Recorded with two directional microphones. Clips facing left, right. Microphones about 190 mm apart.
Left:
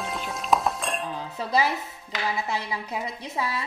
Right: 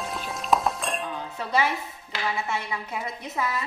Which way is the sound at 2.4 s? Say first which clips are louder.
Even; 35° left (ahead or behind).